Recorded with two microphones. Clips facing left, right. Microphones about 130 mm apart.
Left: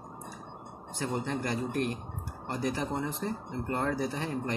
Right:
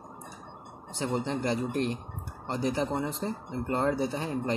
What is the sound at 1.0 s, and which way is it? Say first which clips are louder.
Speech: right 3 dB; 20° right (ahead or behind).